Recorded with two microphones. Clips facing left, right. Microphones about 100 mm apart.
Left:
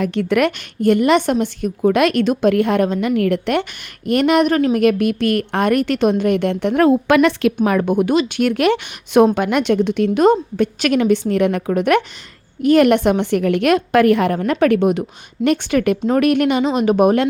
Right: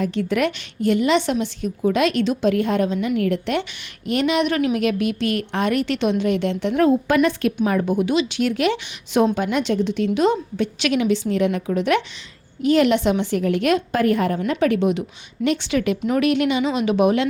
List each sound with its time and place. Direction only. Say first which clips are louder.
0.0 s a woman's voice: left 4 dB; 65° left (ahead or behind); by 17.2 s 45° left (ahead or behind)